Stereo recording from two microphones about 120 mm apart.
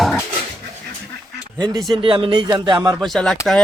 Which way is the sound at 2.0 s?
45° right (ahead or behind).